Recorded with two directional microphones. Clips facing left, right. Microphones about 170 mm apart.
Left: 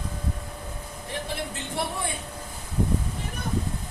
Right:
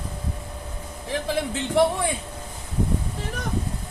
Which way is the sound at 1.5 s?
90° right.